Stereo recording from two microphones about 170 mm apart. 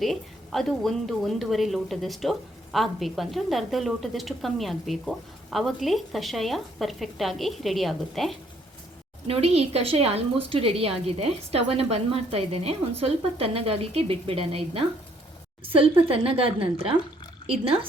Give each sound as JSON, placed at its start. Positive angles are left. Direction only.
{"t": 0.0, "sound": "a woman's voice", "side_deg": 0}
{"t": 9.2, "sound": "a woman's voice", "side_deg": -35}